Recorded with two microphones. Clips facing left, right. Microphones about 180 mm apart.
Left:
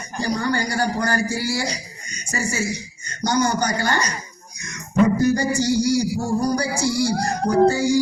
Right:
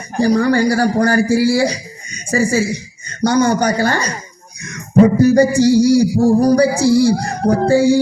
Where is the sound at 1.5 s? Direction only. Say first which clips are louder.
Right 10 dB; 60° right (ahead or behind).